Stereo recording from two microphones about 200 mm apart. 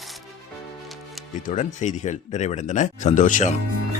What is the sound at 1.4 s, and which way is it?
Speech, 35° left (ahead or behind).